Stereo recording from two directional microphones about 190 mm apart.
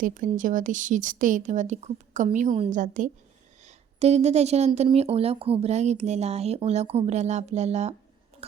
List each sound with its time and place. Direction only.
0.0 s a woman's voice: 45° right (ahead or behind)